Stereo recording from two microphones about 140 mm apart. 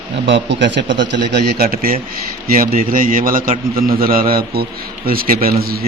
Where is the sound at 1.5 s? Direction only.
90° right.